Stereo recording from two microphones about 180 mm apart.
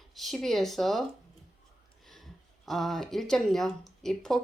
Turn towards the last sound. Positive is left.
turn(degrees=0)  # may be behind; listen again after turning